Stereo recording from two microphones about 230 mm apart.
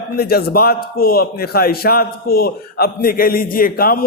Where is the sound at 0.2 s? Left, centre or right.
Left.